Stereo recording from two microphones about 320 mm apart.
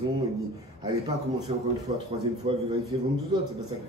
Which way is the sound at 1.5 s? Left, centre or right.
Centre.